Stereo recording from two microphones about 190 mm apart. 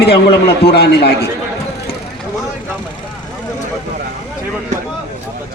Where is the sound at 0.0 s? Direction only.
55° left (ahead or behind).